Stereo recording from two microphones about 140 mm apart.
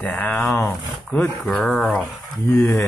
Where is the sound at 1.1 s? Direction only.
5° left (ahead or behind).